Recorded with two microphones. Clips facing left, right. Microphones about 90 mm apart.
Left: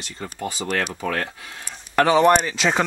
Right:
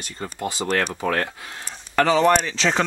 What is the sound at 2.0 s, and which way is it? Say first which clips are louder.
Speech: left 2 dB; 15° left (ahead or behind).